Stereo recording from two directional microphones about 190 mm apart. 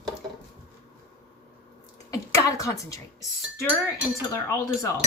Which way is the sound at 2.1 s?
15° left (ahead or behind).